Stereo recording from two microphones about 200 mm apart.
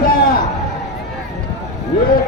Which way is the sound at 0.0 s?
45° left (ahead or behind).